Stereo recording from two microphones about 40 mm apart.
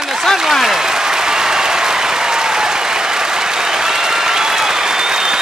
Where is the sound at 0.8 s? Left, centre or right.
Centre.